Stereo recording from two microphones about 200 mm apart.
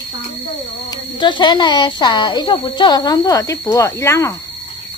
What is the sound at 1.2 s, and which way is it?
A woman's voice, 20° left (ahead or behind).